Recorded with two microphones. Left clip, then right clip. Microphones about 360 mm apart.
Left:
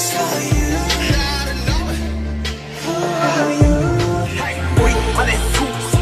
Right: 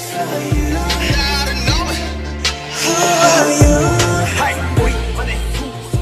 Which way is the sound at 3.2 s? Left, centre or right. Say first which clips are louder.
Right 4 dB; right.